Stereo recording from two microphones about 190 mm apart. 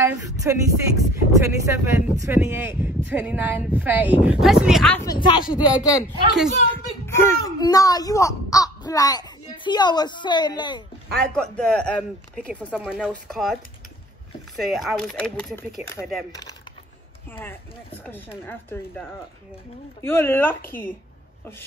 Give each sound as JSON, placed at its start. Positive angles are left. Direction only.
{"t": 0.0, "sound": "speech", "side_deg": -15}
{"t": 4.9, "sound": "a woman's voice", "side_deg": 20}
{"t": 6.7, "sound": "a sound", "side_deg": 15}
{"t": 9.7, "sound": "a woman's voice", "side_deg": 20}
{"t": 11.3, "sound": "speech", "side_deg": 5}
{"t": 14.6, "sound": "speech", "side_deg": 0}
{"t": 17.3, "sound": "speech", "side_deg": 10}